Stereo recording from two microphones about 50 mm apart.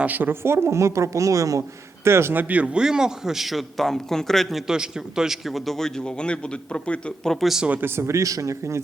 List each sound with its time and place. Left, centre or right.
0.0 s speech: right
0.4 s a woman's voice: right
2.0 s speech: right
2.3 s speech: right
2.7 s a man's voice: centre
4.6 s a man's voice: centre
5.5 s a man's voice: centre; by 7.1 s left
7.4 s a man's voice: centre
7.9 s a man's voice: right